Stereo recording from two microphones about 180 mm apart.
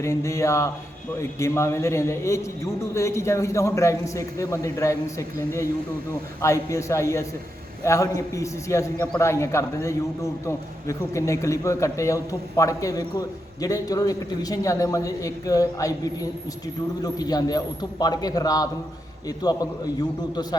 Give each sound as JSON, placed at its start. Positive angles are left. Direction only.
{"t": 0.0, "sound": "a man's voice", "side_deg": 15}
{"t": 6.4, "sound": "a man's voice", "side_deg": 15}